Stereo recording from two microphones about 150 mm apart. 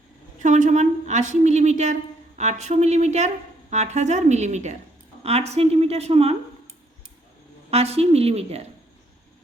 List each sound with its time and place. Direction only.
0.4 s a woman's voice: 55° right (ahead or behind)
7.7 s a woman's voice: 45° right (ahead or behind)